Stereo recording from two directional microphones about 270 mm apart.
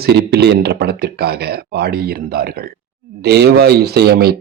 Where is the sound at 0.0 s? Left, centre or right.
Right.